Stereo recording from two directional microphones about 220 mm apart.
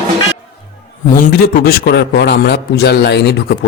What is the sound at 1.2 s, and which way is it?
A man's voice, 40° left (ahead or behind).